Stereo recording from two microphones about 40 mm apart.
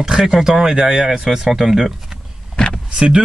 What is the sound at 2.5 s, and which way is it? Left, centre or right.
Vehicle, left.